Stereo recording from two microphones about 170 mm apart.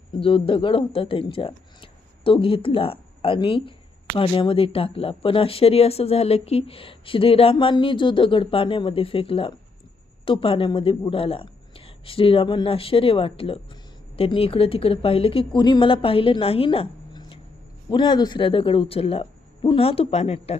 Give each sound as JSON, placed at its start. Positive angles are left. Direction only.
{"t": 0.1, "sound": "speech", "side_deg": 30}